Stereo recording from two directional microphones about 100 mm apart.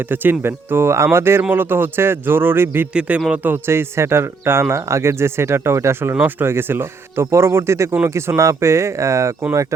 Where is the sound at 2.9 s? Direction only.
10° right (ahead or behind).